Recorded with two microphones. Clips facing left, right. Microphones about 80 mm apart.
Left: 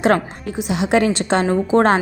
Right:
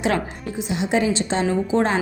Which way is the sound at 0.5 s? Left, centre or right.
Left.